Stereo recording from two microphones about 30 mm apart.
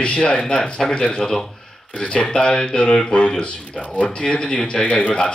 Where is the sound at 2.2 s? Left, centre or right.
Left.